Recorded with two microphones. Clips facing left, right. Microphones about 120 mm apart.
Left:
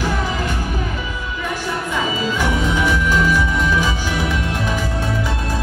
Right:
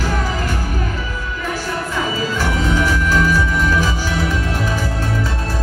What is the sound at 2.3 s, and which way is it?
Music, 15° left (ahead or behind).